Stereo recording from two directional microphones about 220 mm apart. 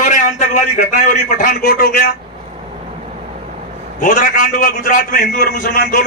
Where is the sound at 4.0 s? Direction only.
35° left (ahead or behind).